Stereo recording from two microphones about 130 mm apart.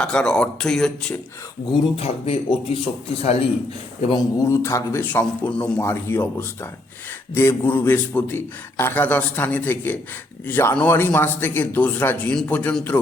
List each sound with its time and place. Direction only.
0.0 s speech: 5° left (ahead or behind)
2.0 s speech: 50° left (ahead or behind)
4.4 s a man's voice: 20° left (ahead or behind)